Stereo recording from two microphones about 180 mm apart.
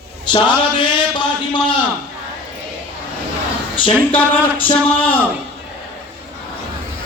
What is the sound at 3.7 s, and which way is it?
Speech, 30° left (ahead or behind).